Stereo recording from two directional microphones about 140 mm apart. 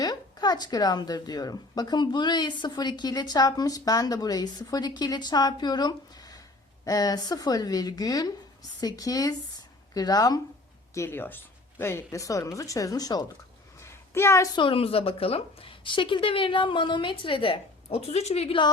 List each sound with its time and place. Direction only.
0.0 s speech: 30° left (ahead or behind)
13.8 s a sound: 20° left (ahead or behind)
14.5 s a woman's voice: 40° left (ahead or behind)